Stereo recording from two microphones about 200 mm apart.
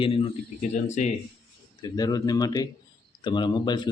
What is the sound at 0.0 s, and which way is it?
A man's voice, 25° left (ahead or behind).